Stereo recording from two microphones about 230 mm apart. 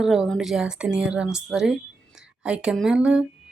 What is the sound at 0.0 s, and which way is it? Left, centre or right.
Speech, centre.